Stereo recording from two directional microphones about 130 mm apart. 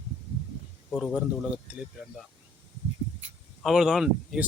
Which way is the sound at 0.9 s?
5° left (ahead or behind).